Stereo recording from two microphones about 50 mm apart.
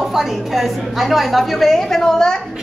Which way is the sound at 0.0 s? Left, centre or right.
Centre.